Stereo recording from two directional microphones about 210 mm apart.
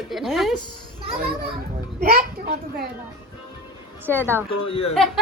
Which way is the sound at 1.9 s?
45° right (ahead or behind).